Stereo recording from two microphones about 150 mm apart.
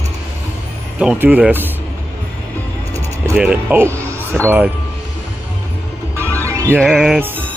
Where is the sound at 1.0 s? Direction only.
10° right (ahead or behind).